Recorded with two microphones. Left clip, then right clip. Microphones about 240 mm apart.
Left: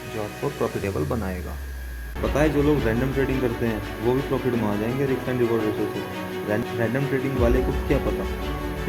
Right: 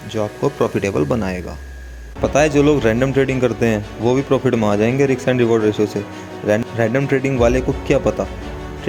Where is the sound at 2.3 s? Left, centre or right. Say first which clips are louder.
Right 7 dB; right.